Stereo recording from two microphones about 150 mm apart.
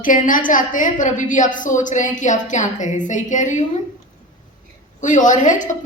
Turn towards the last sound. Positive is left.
turn(degrees=60)  # may be behind; listen again after turning